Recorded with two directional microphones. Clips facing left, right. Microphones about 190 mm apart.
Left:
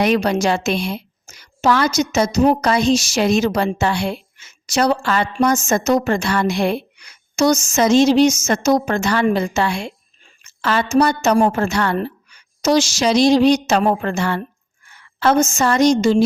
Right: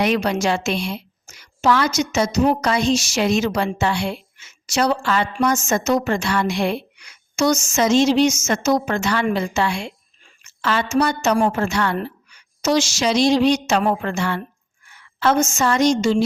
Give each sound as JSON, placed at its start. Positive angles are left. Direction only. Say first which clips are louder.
{"t": 0.0, "sound": "a woman's voice", "louder": "left 3 dB", "side_deg": 40}